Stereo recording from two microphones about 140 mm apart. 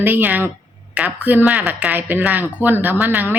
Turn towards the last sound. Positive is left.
turn(degrees=-10)  # may be behind; listen again after turning